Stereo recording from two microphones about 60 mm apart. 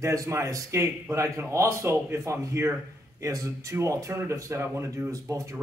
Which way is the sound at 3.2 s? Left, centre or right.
Right.